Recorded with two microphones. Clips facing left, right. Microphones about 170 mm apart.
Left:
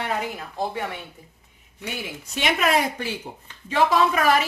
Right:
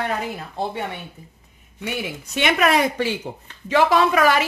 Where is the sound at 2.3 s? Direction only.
65° right (ahead or behind).